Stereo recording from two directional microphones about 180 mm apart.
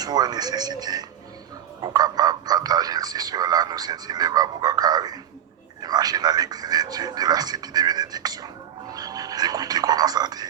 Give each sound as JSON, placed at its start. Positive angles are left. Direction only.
{"t": 0.0, "sound": "speech", "side_deg": -25}